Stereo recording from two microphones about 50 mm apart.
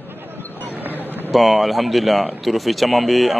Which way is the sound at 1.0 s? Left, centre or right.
Right.